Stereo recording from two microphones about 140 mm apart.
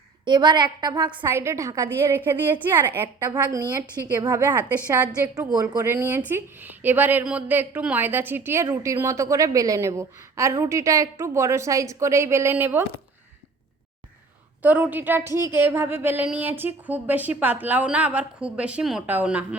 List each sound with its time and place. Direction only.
0.3 s a woman's voice: 30° right (ahead or behind)
1.3 s a woman's voice: 20° right (ahead or behind)
5.8 s a woman's voice: 15° right (ahead or behind)
14.6 s speech: 10° right (ahead or behind)